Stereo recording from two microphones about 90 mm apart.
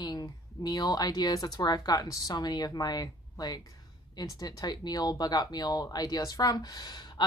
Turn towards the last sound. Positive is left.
turn(degrees=50)  # may be behind; listen again after turning